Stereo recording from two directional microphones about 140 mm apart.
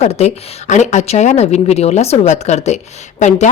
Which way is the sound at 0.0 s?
50° left (ahead or behind).